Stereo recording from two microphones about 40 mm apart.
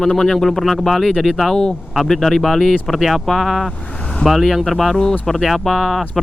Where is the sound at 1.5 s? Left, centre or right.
Left.